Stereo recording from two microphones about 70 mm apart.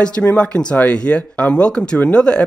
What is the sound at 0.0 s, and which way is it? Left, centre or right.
Speech, centre.